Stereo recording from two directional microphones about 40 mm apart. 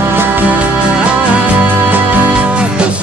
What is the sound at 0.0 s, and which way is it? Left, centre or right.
Music, right.